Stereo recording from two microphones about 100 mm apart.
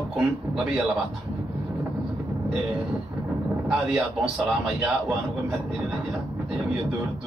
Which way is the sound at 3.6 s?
Centre (ahead or behind).